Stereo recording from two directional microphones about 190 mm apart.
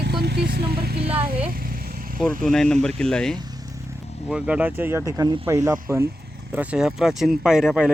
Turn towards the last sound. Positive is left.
turn(degrees=-5)  # may be behind; listen again after turning